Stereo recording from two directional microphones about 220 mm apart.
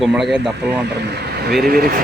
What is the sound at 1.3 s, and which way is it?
Speech, 45° right (ahead or behind).